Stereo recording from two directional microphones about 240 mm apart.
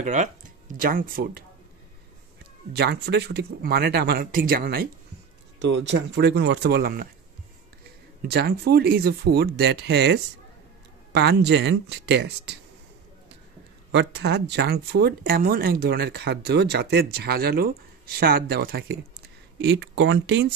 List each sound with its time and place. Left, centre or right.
0.0 s speech: right
2.7 s speech: right
8.3 s speech: right
13.9 s speech: right